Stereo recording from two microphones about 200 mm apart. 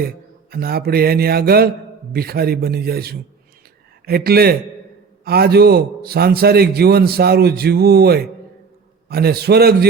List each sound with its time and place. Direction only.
0.5 s a man's voice: 50° right (ahead or behind)